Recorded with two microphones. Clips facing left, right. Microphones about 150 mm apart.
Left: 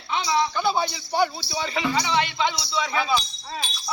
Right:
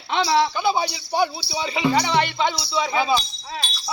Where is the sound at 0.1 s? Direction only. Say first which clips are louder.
Right 4 dB; 75° right (ahead or behind).